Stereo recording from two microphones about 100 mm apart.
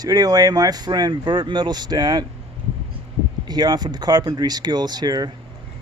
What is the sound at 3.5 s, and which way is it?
Speech, 45° right (ahead or behind).